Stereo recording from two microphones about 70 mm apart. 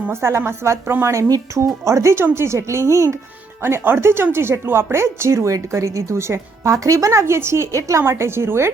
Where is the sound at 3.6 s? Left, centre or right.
Right.